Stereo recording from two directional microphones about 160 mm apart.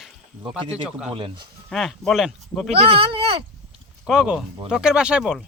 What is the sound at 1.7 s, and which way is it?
Speech, centre (ahead or behind).